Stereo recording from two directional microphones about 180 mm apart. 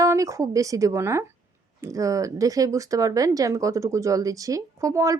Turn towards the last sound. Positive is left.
turn(degrees=-15)  # may be behind; listen again after turning